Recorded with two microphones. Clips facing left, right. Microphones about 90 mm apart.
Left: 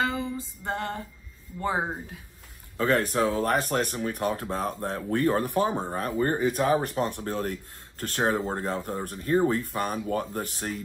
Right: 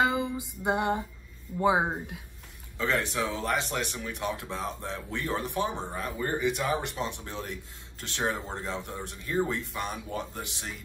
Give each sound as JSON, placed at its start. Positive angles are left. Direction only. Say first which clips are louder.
{"t": 0.0, "sound": "music", "louder": "right 2 dB", "side_deg": -15}
{"t": 1.6, "sound": "speech", "louder": "right 3 dB", "side_deg": -10}
{"t": 2.8, "sound": "speech", "louder": "left 5 dB", "side_deg": 45}